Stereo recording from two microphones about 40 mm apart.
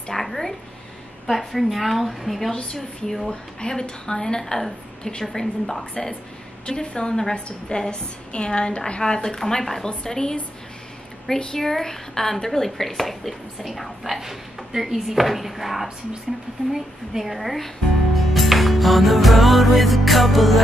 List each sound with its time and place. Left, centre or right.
0.1 s a sound: centre
1.3 s speech: centre
2.5 s speech: centre
6.6 s a woman's voice: left
11.3 s speech: centre
18.3 s music: centre